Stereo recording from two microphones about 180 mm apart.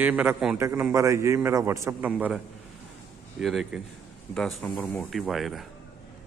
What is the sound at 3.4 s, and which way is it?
Speech, centre (ahead or behind).